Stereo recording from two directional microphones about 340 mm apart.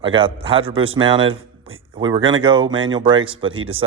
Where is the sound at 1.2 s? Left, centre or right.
Right.